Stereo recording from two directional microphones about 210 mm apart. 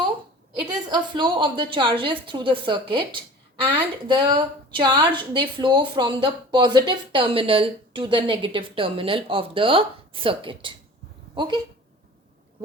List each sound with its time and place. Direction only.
0.7 s a woman's voice: 20° right (ahead or behind)